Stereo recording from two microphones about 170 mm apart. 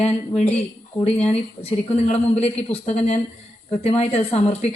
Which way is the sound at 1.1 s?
5° left (ahead or behind).